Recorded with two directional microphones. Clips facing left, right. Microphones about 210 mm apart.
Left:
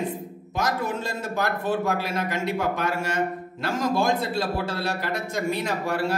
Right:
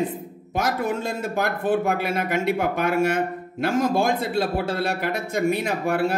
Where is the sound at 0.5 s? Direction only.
55° right (ahead or behind).